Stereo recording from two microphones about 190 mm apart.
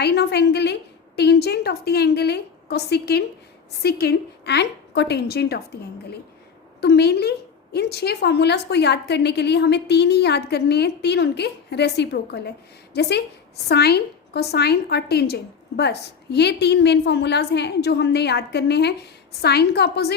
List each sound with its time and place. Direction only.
0.0 s speech: 60° left (ahead or behind)
6.8 s speech: 60° left (ahead or behind)